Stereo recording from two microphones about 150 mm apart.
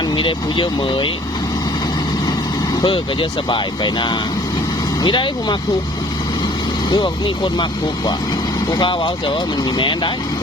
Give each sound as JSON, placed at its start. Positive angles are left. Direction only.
{"t": 0.2, "sound": "speech", "side_deg": 35}
{"t": 2.8, "sound": "speech", "side_deg": 35}
{"t": 6.9, "sound": "speech", "side_deg": 30}